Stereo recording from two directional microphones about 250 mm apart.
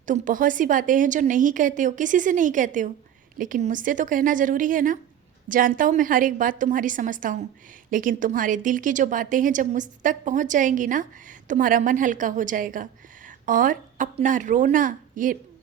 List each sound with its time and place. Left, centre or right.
0.0 s a woman's voice: right